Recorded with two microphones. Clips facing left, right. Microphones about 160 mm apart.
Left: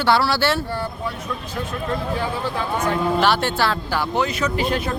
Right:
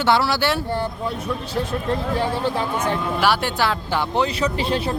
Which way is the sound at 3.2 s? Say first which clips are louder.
Left 1 dB; 10° right (ahead or behind).